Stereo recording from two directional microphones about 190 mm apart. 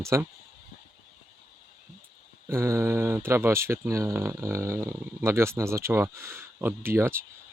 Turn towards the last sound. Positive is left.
turn(degrees=-15)  # may be behind; listen again after turning